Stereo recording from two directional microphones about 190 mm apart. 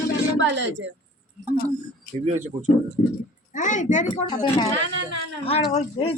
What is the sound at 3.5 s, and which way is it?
Speech, 40° left (ahead or behind).